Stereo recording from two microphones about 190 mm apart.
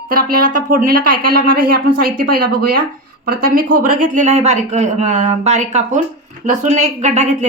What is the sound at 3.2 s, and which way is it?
Speech, 50° right (ahead or behind).